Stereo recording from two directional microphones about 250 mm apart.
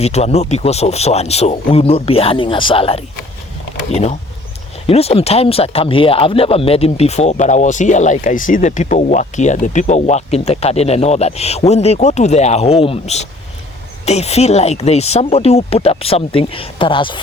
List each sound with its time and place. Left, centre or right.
0.0 s speech: left
4.9 s speech: left